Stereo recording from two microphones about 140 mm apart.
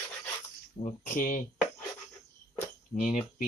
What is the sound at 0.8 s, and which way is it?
Speech, 65° left (ahead or behind).